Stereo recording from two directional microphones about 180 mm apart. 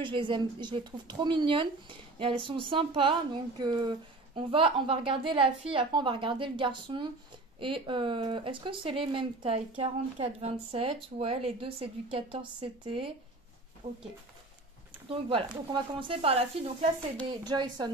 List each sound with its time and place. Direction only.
0.0 s speech: 30° right (ahead or behind)
15.0 s speech: 30° right (ahead or behind)